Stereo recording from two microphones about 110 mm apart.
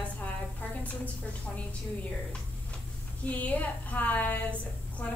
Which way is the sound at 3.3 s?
15° left (ahead or behind).